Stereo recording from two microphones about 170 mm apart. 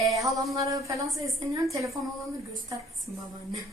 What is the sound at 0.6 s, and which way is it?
A woman's voice, 20° right (ahead or behind).